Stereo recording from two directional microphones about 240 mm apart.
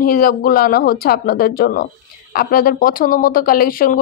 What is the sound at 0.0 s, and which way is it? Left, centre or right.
A woman's voice, left.